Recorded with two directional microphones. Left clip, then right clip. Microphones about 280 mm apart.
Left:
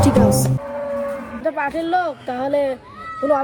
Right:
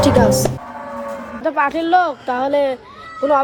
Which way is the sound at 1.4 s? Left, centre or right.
Centre.